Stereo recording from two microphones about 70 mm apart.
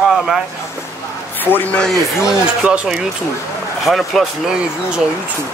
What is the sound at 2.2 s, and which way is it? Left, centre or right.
Speech, centre.